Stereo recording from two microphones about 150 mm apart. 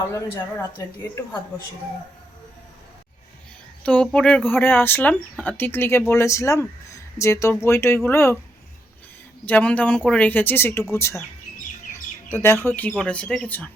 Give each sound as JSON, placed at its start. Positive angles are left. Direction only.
{"t": 0.1, "sound": "a woman's voice", "side_deg": 20}
{"t": 3.8, "sound": "speech", "side_deg": 10}
{"t": 9.5, "sound": "a woman's voice", "side_deg": 10}
{"t": 12.3, "sound": "speech", "side_deg": 15}